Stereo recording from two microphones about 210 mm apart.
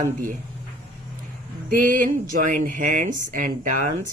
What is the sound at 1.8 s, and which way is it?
Speech, 40° right (ahead or behind).